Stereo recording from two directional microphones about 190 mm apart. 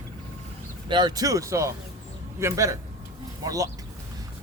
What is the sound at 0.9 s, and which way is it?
Speech, 25° right (ahead or behind).